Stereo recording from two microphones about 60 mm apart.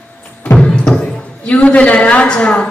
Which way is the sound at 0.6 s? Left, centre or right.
Centre.